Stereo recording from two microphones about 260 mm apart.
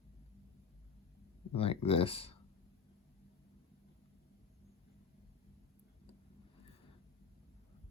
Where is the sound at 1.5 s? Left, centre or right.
Left.